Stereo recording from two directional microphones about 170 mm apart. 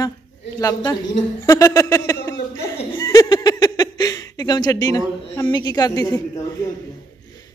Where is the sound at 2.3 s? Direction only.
20° left (ahead or behind).